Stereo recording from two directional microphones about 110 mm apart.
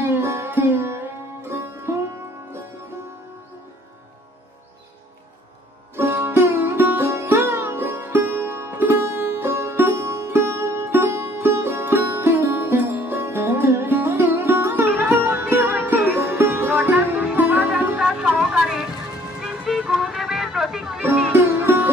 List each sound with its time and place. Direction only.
0.0 s music: 20° right (ahead or behind)
1.9 s sitar: 20° right (ahead or behind)
5.9 s music: 20° right (ahead or behind)
18.0 s music: 5° right (ahead or behind)
21.3 s music: 20° right (ahead or behind)